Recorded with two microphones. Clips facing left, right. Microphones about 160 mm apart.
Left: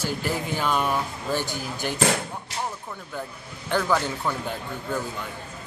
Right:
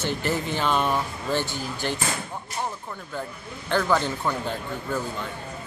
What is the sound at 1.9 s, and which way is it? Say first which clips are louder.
Basketball bounce: left 6 dB; 80° left.